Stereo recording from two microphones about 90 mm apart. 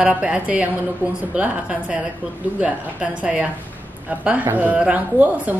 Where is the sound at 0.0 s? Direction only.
10° right (ahead or behind).